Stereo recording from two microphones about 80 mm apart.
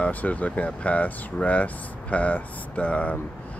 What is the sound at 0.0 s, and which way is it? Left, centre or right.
Speech, centre.